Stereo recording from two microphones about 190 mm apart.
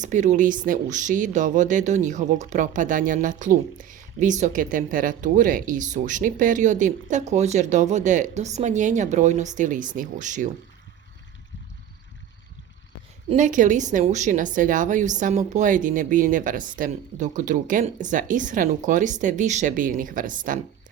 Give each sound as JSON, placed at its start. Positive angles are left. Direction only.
{"t": 0.0, "sound": "speech", "side_deg": -40}
{"t": 13.2, "sound": "a woman's voice", "side_deg": -40}